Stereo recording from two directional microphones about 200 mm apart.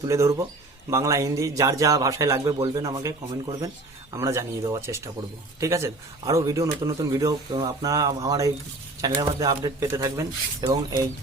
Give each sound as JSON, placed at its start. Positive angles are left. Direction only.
{"t": 0.0, "sound": "a man's voice", "side_deg": -15}